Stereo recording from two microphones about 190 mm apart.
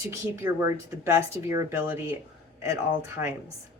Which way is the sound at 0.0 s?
15° right (ahead or behind).